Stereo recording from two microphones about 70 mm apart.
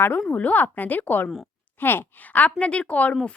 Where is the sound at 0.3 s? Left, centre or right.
Left.